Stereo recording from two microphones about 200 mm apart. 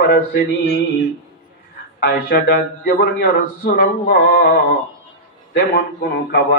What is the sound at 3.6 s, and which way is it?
Speech, 50° left (ahead or behind).